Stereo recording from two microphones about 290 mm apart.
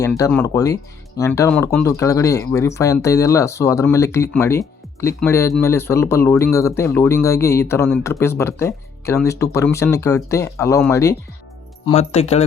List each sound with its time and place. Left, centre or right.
0.2 s speech: centre
11.9 s speech: left